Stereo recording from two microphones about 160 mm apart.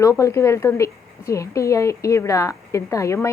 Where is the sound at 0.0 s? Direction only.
20° left (ahead or behind).